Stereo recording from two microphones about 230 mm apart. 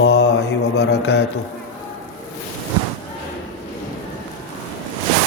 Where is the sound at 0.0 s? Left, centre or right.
Left.